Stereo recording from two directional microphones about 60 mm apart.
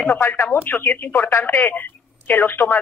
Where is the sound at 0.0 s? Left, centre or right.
Left.